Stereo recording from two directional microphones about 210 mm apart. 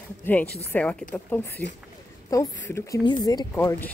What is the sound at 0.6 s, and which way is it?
Speech, 5° left (ahead or behind).